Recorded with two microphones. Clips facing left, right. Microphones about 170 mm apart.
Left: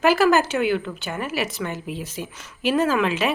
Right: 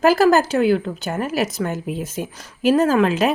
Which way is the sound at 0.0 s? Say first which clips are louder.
Right 3 dB; 40° right (ahead or behind).